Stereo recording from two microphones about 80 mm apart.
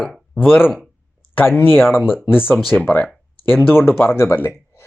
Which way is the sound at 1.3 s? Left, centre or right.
Left.